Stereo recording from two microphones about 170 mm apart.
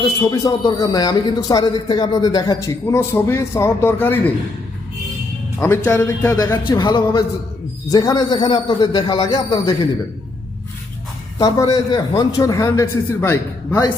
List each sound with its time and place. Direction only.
0.2 s speech: 25° left (ahead or behind)
5.5 s speech: 15° left (ahead or behind)
11.3 s speech: 25° left (ahead or behind)